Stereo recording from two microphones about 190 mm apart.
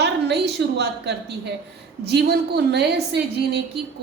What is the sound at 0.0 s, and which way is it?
A woman's voice, 60° right (ahead or behind).